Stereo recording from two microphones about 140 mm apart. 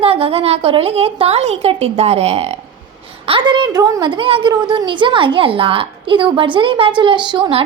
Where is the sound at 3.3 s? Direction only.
35° right (ahead or behind).